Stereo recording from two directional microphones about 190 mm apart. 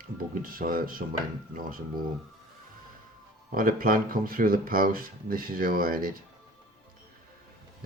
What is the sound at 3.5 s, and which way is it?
Speech, 45° right (ahead or behind).